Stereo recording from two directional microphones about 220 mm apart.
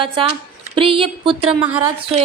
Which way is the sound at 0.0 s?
25° right (ahead or behind).